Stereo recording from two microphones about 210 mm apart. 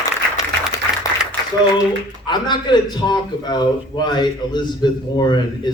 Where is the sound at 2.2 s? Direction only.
20° left (ahead or behind).